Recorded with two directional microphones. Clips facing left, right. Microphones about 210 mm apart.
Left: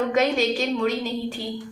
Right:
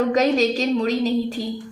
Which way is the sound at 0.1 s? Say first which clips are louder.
Right 3 dB; 40° right (ahead or behind).